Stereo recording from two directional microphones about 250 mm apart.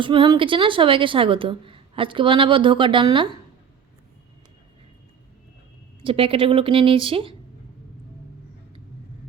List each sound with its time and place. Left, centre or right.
0.0 s a woman's voice: centre
6.0 s a woman's voice: right